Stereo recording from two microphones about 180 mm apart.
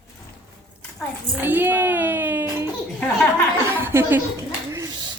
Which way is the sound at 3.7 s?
10° right (ahead or behind).